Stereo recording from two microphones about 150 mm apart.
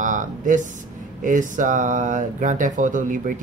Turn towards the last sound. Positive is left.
turn(degrees=-60)  # may be behind; listen again after turning